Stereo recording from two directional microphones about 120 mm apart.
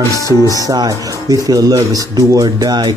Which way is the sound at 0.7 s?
30° right (ahead or behind).